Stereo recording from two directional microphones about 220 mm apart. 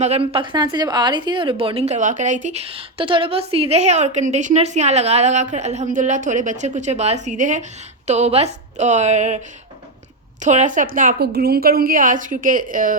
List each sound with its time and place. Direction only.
0.0 s a woman's voice: 30° right (ahead or behind)
10.4 s a woman's voice: 35° right (ahead or behind)